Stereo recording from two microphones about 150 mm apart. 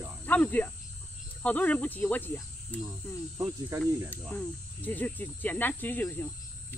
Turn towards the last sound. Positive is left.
turn(degrees=15)  # may be behind; listen again after turning